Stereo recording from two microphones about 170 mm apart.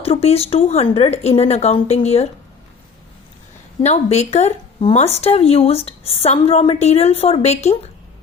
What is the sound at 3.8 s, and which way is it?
Speech, 40° left (ahead or behind).